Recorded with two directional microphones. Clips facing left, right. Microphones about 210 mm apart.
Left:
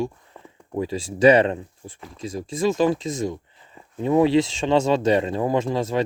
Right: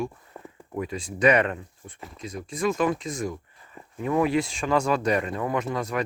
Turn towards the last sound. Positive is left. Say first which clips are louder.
# left 5 dB
turn(degrees=25)  # may be behind; listen again after turning